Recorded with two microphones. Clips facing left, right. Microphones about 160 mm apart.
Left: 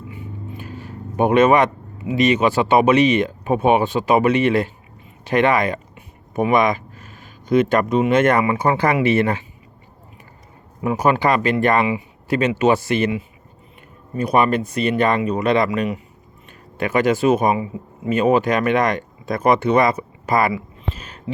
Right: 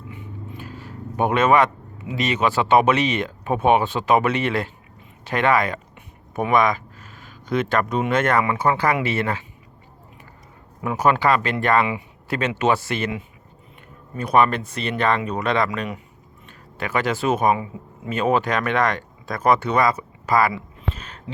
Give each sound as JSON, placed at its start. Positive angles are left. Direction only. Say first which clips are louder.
{"t": 1.1, "sound": "speech", "louder": "left 4 dB", "side_deg": 15}
{"t": 7.0, "sound": "a sound", "louder": "left 2 dB", "side_deg": 45}
{"t": 7.4, "sound": "speech", "louder": "left 5 dB", "side_deg": 15}
{"t": 10.8, "sound": "speech", "louder": "left 2 dB", "side_deg": 15}
{"t": 14.2, "sound": "speech", "louder": "left 1 dB", "side_deg": 10}
{"t": 20.9, "sound": "a sound", "louder": "left 1 dB", "side_deg": 10}